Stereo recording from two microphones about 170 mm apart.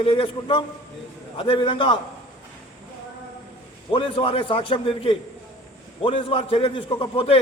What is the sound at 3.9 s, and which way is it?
A man's voice, 30° left (ahead or behind).